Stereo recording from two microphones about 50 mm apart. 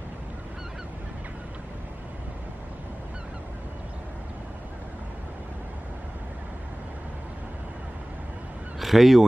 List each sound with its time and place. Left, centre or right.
8.7 s honk: centre